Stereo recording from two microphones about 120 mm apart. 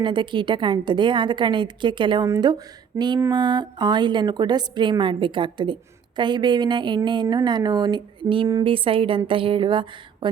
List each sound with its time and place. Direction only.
0.0 s a woman's voice: 40° right (ahead or behind)
2.2 s a woman's voice: 30° right (ahead or behind)